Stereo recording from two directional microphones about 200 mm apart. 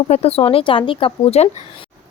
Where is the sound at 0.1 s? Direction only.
30° left (ahead or behind).